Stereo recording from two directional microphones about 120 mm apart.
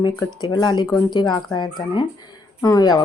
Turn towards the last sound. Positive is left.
turn(degrees=35)  # may be behind; listen again after turning